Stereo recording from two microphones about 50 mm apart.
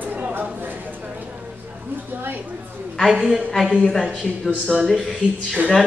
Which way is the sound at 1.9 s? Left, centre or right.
Right.